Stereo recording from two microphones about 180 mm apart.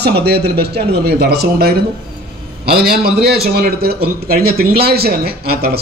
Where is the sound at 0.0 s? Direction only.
65° right (ahead or behind).